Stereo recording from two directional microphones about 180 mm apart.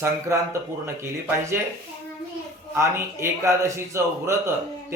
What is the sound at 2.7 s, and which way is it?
A man's voice, 15° right (ahead or behind).